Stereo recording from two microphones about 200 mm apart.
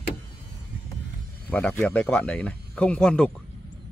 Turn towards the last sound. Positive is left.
turn(degrees=5)  # may be behind; listen again after turning